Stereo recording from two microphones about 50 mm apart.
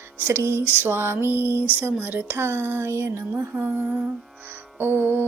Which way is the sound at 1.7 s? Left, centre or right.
Right.